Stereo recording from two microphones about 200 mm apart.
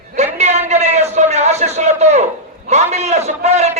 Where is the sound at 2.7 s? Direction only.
35° right (ahead or behind).